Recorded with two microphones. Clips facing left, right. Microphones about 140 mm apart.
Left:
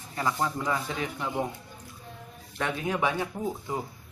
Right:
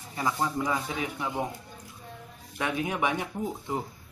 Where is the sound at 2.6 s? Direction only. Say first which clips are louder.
Even; 15° right (ahead or behind).